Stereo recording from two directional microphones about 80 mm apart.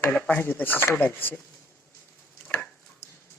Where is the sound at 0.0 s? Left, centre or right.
Centre.